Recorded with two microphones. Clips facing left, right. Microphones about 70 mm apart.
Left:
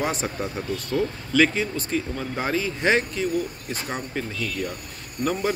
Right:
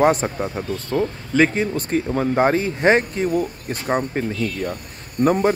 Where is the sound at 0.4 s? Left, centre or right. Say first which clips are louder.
Right 3 dB; right.